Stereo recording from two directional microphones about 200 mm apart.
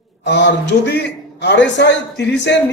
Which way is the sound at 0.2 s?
60° left (ahead or behind).